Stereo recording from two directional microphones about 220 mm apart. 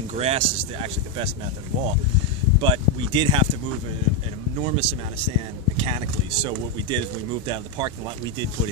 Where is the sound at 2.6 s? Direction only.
20° right (ahead or behind).